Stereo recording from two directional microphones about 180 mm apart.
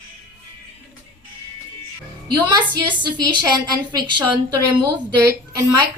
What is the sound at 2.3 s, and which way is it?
A woman's voice, 25° right (ahead or behind).